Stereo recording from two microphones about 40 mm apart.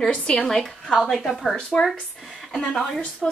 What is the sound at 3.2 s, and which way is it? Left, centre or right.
Speech, centre.